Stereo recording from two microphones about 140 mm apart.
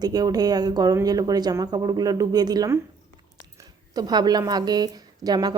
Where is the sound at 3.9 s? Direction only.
30° right (ahead or behind).